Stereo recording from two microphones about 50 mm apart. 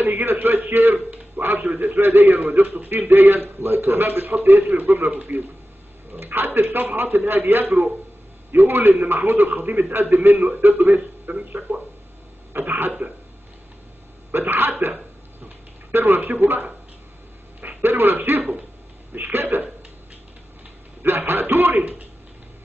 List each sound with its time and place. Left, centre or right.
0.0 s a man's voice: right
11.2 s speech: right
12.5 s a man's voice: right
14.3 s a man's voice: right
21.0 s a man's voice: right